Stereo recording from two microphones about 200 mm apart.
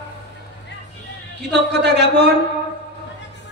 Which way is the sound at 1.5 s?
60° right (ahead or behind).